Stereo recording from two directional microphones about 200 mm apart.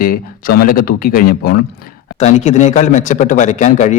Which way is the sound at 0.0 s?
45° left (ahead or behind).